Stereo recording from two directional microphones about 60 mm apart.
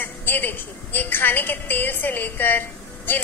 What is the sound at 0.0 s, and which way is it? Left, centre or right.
A woman's voice, left.